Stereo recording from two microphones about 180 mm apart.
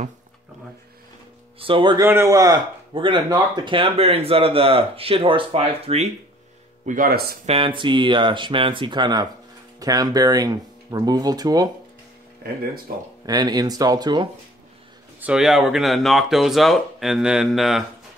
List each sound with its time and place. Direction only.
1.6 s speech: 30° right (ahead or behind)
2.0 s speech: 15° right (ahead or behind); by 6.0 s 35° right (ahead or behind)
6.9 s speech: 50° right (ahead or behind)
7.4 s speech: 30° right (ahead or behind)
13.2 s speech: 20° right (ahead or behind)
15.1 s speech: 5° right (ahead or behind)